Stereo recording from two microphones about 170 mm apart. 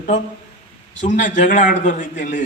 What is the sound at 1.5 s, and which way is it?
Speech, 50° left (ahead or behind).